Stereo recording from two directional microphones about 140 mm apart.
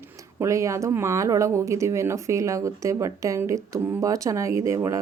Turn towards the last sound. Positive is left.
turn(degrees=-20)  # may be behind; listen again after turning